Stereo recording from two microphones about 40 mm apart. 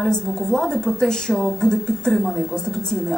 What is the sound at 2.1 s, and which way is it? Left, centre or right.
Speech, centre.